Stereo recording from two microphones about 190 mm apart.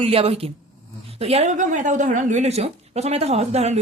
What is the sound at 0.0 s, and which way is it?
A woman's voice, 30° right (ahead or behind).